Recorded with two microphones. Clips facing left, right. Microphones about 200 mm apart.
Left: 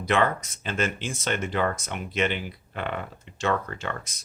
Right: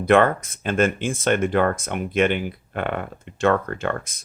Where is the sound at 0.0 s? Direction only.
55° right (ahead or behind).